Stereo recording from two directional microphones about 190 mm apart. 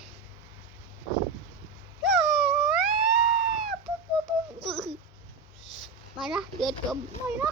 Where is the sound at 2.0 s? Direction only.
Centre (ahead or behind).